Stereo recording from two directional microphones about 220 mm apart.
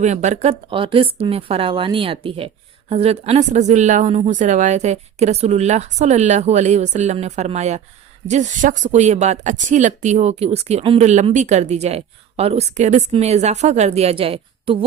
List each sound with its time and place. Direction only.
0.0 s a woman's voice: 30° right (ahead or behind)